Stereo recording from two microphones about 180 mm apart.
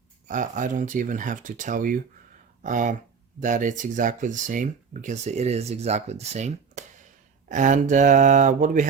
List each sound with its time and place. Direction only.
0.3 s speech: 45° right (ahead or behind)